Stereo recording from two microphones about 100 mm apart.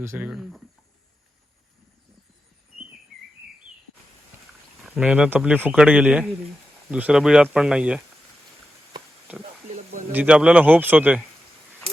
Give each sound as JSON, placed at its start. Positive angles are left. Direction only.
{"t": 0.0, "sound": "speech", "side_deg": -25}
{"t": 0.3, "sound": "speech", "side_deg": -5}
{"t": 4.8, "sound": "speech", "side_deg": -10}
{"t": 9.3, "sound": "speech", "side_deg": -15}